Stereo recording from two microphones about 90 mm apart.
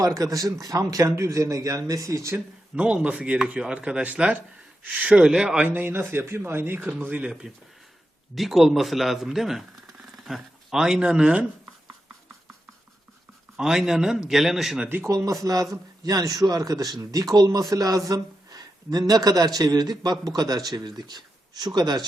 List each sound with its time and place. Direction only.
0.0 s a man's voice: 40° right (ahead or behind)
2.7 s speech: 15° right (ahead or behind)
5.6 s a man's voice: 20° right (ahead or behind)
7.3 s speech: 5° right (ahead or behind)
13.6 s speech: 5° right (ahead or behind)
14.8 s a man's voice: 25° right (ahead or behind)
15.1 s a man's voice: 40° right (ahead or behind)